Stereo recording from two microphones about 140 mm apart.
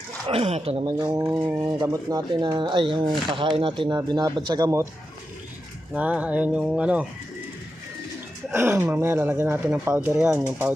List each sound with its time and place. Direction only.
0.3 s speech: 45° right (ahead or behind)
0.9 s speech: 30° right (ahead or behind)
1.2 s speech: 20° right (ahead or behind)
5.9 s speech: 10° right (ahead or behind)
8.5 s speech: 15° right (ahead or behind)